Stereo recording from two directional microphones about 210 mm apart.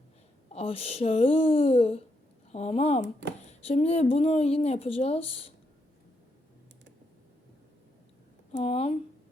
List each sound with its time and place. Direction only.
0.5 s speech: 30° left (ahead or behind)
8.5 s speech: 30° left (ahead or behind)